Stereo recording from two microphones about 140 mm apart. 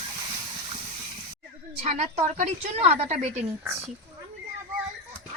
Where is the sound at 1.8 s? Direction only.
50° right (ahead or behind).